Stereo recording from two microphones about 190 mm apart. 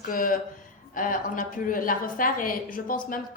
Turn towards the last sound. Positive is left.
turn(degrees=45)  # may be behind; listen again after turning